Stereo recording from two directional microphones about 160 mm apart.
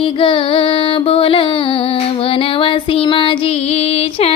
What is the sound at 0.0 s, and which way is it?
Music, 30° left (ahead or behind).